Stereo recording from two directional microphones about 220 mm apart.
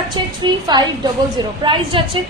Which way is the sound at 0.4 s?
20° right (ahead or behind).